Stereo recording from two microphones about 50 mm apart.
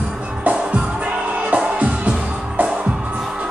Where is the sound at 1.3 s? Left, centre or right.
Right.